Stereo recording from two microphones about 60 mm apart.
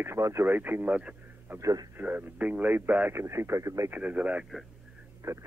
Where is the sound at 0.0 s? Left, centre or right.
Right.